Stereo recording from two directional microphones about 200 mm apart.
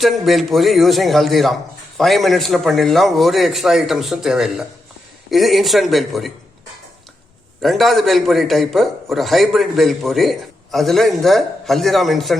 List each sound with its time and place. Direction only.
0.0 s a man's voice: centre (ahead or behind)
7.6 s a man's voice: centre (ahead or behind)